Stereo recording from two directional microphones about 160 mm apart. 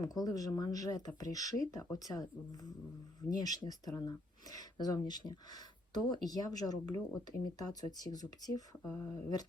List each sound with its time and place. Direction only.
0.0 s speech: 25° left (ahead or behind)